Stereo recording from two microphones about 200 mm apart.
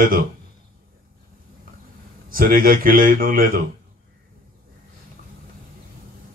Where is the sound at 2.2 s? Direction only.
45° right (ahead or behind).